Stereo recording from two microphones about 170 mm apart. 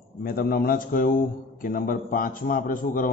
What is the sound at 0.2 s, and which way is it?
A man's voice, 60° left (ahead or behind).